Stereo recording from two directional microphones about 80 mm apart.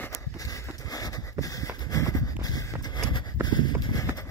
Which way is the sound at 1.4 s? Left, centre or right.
Left.